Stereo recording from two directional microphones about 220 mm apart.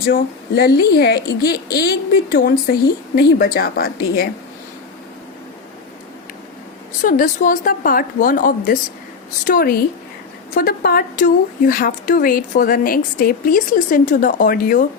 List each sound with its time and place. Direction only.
0.1 s a woman's voice: 45° left (ahead or behind)
7.0 s a woman's voice: 40° left (ahead or behind)